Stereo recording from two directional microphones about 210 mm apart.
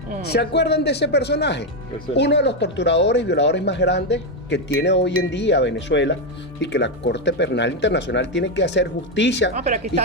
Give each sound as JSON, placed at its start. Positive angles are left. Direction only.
{"t": 0.3, "sound": "speech", "side_deg": 50}
{"t": 9.6, "sound": "speech", "side_deg": -35}